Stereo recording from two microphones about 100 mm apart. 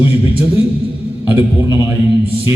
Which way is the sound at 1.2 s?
20° right (ahead or behind).